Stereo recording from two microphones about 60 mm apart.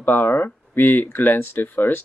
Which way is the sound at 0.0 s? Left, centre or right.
Left.